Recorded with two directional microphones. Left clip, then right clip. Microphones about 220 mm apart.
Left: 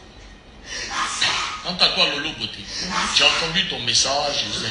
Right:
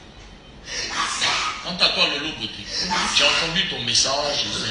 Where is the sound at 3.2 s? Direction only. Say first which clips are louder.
Left 2 dB; 40° left (ahead or behind).